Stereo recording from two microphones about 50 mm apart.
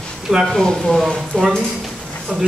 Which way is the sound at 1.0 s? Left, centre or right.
Centre.